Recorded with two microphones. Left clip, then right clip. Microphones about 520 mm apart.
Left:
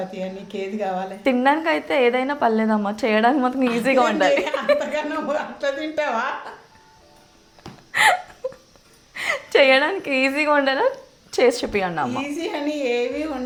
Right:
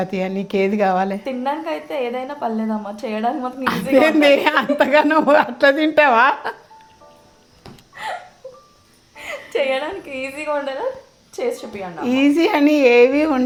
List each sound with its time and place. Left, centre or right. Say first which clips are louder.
0.1 s a woman's voice: right 8 dB; right
1.2 s a woman's voice: left 5 dB; left
4.0 s a woman's voice: right 5 dB; right
9.1 s a woman's voice: left 5 dB; left
12.1 s a woman's voice: right 10 dB; right